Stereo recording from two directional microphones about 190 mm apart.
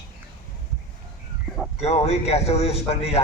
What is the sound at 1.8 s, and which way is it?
A man's voice, 35° left (ahead or behind).